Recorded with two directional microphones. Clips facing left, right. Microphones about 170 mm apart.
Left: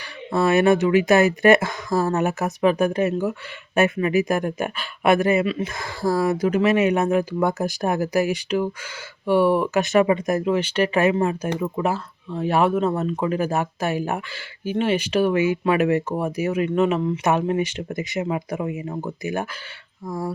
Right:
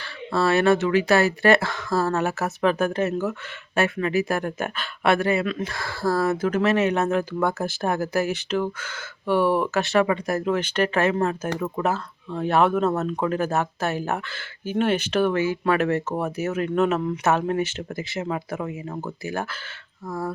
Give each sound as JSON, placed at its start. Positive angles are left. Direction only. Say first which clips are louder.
{"t": 0.3, "sound": "speech", "louder": "left 2 dB", "side_deg": 15}